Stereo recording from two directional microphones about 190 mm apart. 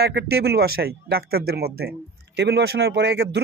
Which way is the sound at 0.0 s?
60° right (ahead or behind).